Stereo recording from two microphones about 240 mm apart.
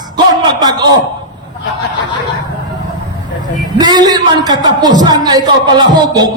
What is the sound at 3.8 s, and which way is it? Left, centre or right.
A man's voice, centre.